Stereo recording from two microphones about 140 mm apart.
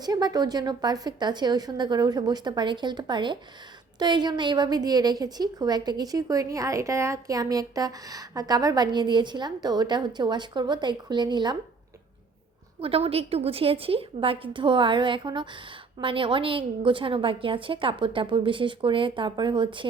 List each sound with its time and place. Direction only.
0.0 s a woman's voice: 30° right (ahead or behind)
12.8 s a woman's voice: 45° right (ahead or behind)